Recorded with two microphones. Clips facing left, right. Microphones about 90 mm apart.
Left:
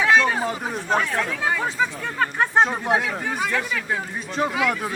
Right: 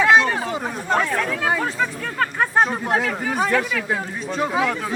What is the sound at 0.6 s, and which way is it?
Chatter, centre (ahead or behind).